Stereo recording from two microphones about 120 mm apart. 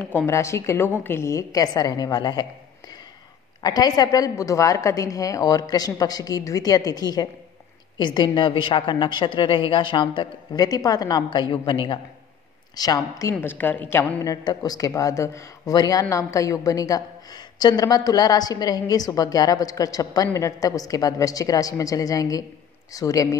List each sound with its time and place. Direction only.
0.3 s a woman's voice: 25° left (ahead or behind)
3.6 s speech: 35° left (ahead or behind)
13.3 s a woman's voice: 15° left (ahead or behind)
14.3 s a woman's voice: 35° left (ahead or behind)